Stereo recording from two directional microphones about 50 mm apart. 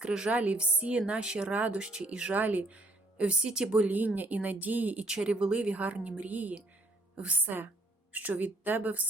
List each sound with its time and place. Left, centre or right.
0.0 s a woman's voice: centre
0.3 s a woman's voice: right
2.3 s speech: right; by 3.8 s centre
3.8 s speech: right
5.0 s a woman's voice: centre; by 9.0 s right